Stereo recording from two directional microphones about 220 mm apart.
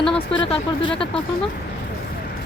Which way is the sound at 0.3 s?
25° left (ahead or behind).